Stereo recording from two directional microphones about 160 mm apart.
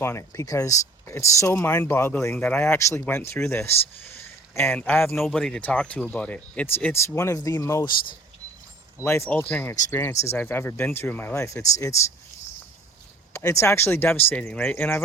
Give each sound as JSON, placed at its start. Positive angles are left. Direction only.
{"t": 0.0, "sound": "speech", "side_deg": 15}
{"t": 7.2, "sound": "speech", "side_deg": 20}
{"t": 9.0, "sound": "speech", "side_deg": 15}
{"t": 13.4, "sound": "speech", "side_deg": 15}